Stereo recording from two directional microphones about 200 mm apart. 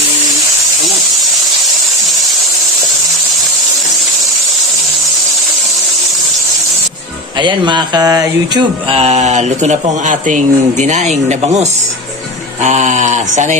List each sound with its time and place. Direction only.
7.3 s mantra: 25° right (ahead or behind)